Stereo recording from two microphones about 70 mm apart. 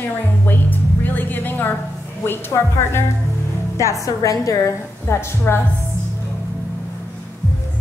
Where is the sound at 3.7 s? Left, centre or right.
Left.